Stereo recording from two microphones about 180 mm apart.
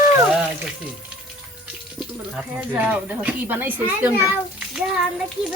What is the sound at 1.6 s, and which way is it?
Speech, 5° right (ahead or behind).